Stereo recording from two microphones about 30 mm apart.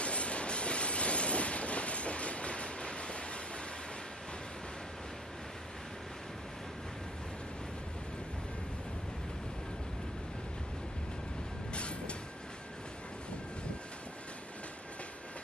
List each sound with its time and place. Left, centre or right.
0.0 s train: left
11.7 s vehicle: left